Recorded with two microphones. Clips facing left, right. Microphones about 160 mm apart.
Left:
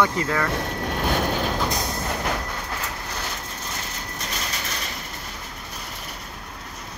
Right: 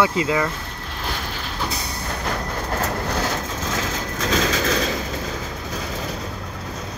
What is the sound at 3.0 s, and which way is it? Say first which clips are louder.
Vehicle: right 9 dB; 90° right.